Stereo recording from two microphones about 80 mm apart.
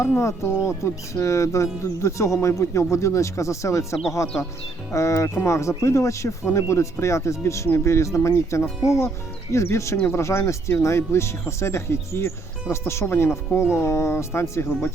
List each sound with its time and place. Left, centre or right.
0.0 s speech: left
4.9 s speech: left